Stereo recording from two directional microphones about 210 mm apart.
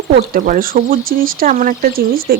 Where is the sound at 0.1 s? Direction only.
45° right (ahead or behind).